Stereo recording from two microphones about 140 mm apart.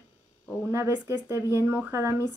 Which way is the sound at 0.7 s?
20° right (ahead or behind).